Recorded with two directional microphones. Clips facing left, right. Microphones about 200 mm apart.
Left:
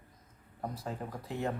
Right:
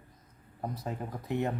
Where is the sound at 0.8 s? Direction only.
20° right (ahead or behind).